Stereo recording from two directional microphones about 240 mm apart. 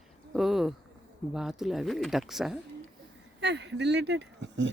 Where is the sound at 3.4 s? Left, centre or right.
Right.